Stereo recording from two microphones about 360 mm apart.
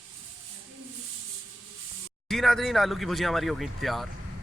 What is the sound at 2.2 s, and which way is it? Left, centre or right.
Speech, centre.